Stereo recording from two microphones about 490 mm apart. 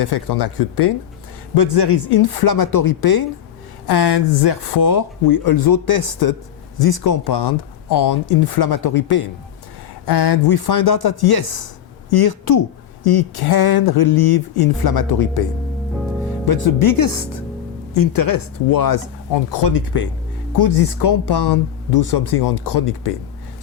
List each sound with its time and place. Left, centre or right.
0.0 s speech: left
16.5 s speech: left